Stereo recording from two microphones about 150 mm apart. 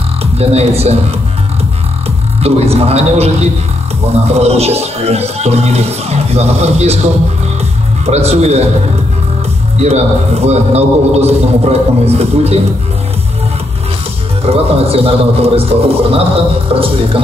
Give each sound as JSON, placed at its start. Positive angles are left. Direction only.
{"t": 0.2, "sound": "speech", "side_deg": -45}
{"t": 2.4, "sound": "a man's voice", "side_deg": -45}
{"t": 4.3, "sound": "a man's voice", "side_deg": -45}
{"t": 8.0, "sound": "a man's voice", "side_deg": -45}
{"t": 9.8, "sound": "a man's voice", "side_deg": -45}
{"t": 14.4, "sound": "speech", "side_deg": -40}